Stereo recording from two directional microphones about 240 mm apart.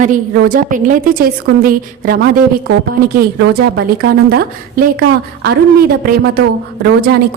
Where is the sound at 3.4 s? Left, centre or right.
Right.